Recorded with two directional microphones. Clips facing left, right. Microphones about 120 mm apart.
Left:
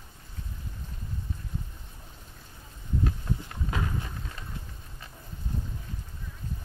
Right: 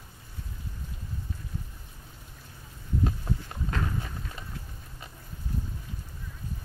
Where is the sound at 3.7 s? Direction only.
10° left (ahead or behind).